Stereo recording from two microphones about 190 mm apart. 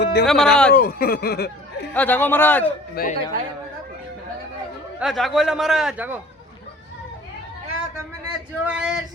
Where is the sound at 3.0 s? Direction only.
50° left (ahead or behind).